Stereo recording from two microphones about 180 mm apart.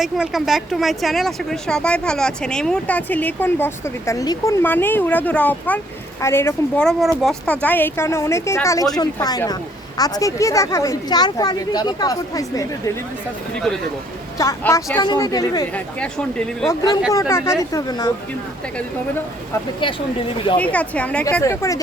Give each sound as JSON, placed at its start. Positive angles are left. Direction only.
{"t": 0.0, "sound": "speech", "side_deg": 0}
{"t": 14.3, "sound": "speech", "side_deg": 15}
{"t": 15.7, "sound": "speech", "side_deg": 5}
{"t": 17.1, "sound": "speech", "side_deg": 15}
{"t": 20.6, "sound": "speech", "side_deg": 10}